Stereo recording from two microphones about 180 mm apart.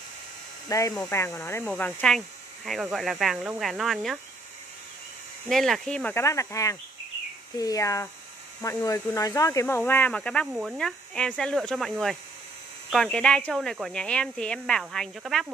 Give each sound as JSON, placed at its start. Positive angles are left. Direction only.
{"t": 0.7, "sound": "speech", "side_deg": 20}
{"t": 5.5, "sound": "speech", "side_deg": 0}
{"t": 10.5, "sound": "speech", "side_deg": -5}